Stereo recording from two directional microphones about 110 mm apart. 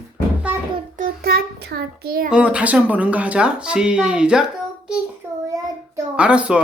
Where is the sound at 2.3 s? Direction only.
10° right (ahead or behind).